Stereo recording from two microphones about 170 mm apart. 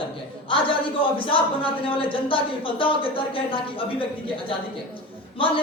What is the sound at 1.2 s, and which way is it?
Speech, 30° left (ahead or behind).